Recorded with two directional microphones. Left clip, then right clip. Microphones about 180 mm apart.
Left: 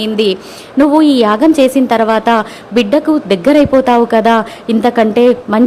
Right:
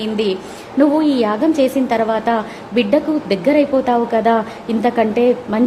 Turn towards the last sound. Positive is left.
turn(degrees=25)  # may be behind; listen again after turning